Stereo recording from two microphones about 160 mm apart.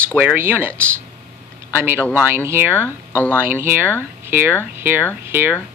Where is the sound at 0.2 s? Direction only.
10° right (ahead or behind).